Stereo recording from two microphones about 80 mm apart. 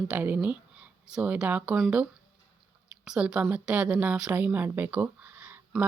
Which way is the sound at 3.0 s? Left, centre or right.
Centre.